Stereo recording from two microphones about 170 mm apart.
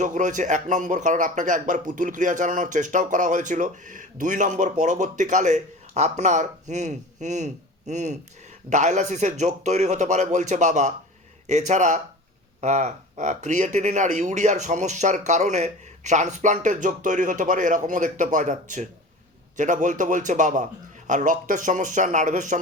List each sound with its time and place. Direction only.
0.0 s speech: 45° right (ahead or behind)